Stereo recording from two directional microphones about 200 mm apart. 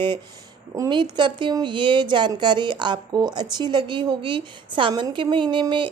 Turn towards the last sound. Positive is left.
turn(degrees=-25)  # may be behind; listen again after turning